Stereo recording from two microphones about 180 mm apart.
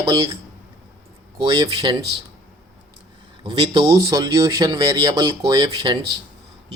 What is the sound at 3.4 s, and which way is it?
Speech, 25° right (ahead or behind).